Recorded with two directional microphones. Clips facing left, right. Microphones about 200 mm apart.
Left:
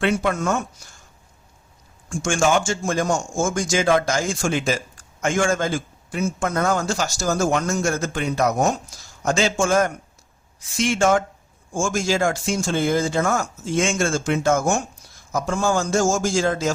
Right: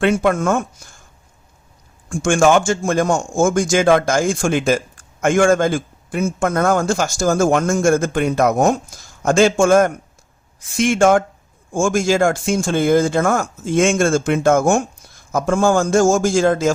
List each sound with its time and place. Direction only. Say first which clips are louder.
0.0 s a man's voice: right 5 dB; 50° right (ahead or behind)
2.0 s a man's voice: right 6 dB; 55° right (ahead or behind)